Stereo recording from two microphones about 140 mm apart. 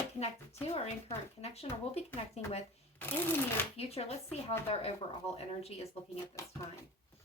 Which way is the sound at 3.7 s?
45° left (ahead or behind).